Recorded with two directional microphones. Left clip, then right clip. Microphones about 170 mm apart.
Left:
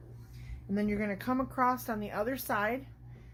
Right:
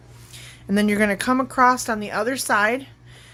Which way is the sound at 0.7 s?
55° right (ahead or behind).